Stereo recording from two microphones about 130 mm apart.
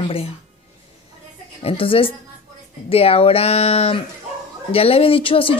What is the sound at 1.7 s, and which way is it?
Speech, 45° left (ahead or behind).